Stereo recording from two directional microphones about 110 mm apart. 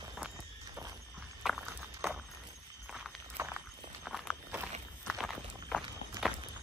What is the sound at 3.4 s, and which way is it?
Horse, 20° right (ahead or behind).